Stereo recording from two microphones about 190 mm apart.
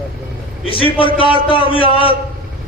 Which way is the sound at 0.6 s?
30° left (ahead or behind).